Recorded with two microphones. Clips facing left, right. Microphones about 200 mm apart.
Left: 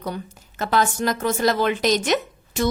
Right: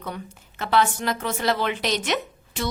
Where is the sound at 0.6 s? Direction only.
45° left (ahead or behind).